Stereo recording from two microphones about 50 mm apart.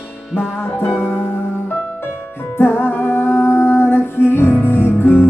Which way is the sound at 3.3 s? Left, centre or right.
Left.